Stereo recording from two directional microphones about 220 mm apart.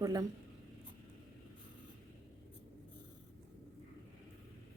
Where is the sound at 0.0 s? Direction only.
15° right (ahead or behind).